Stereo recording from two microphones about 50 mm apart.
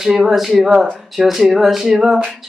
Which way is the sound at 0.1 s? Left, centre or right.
Centre.